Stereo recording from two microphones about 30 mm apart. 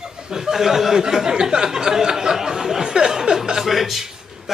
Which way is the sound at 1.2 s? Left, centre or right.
Right.